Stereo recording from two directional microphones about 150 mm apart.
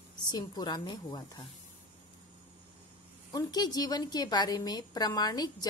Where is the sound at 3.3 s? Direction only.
25° left (ahead or behind).